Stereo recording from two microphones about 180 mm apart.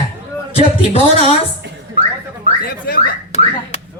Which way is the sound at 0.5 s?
35° left (ahead or behind).